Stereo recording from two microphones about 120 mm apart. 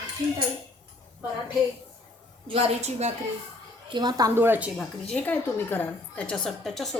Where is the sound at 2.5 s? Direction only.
55° right (ahead or behind).